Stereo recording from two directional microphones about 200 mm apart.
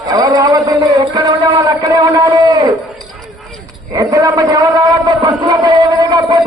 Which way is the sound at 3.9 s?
20° right (ahead or behind).